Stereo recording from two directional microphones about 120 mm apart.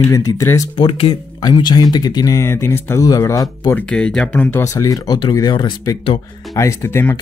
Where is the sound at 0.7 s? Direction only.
40° left (ahead or behind).